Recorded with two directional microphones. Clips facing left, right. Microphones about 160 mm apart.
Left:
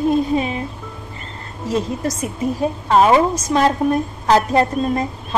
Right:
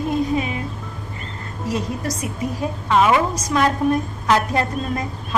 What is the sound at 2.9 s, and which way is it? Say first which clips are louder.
A woman's voice: left 3 dB; 35° left (ahead or behind).